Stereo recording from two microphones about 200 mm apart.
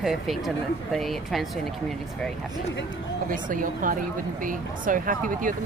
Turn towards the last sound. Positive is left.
turn(degrees=-40)  # may be behind; listen again after turning